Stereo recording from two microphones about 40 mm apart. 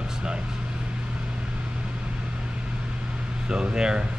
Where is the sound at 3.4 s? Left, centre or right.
Right.